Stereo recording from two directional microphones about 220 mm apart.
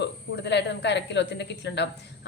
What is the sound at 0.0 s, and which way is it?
Speech, 50° left (ahead or behind).